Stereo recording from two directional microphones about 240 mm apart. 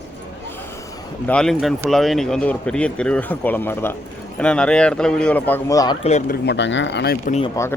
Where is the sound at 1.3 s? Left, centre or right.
Centre; by 7.3 s left.